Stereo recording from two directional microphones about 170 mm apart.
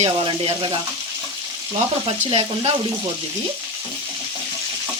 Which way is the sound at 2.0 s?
35° right (ahead or behind).